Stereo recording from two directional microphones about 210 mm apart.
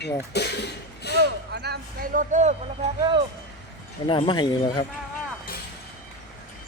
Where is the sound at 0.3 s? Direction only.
50° left (ahead or behind).